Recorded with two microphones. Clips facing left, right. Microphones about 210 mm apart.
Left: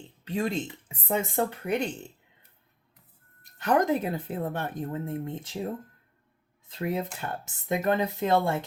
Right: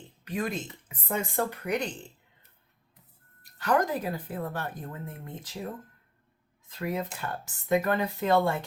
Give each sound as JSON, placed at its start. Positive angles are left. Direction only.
{"t": 0.3, "sound": "speech", "side_deg": 25}
{"t": 3.6, "sound": "speech", "side_deg": 25}
{"t": 6.7, "sound": "speech", "side_deg": 25}